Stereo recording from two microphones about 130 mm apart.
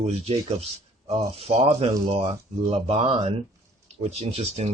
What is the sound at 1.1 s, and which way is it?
Speech, 50° right (ahead or behind).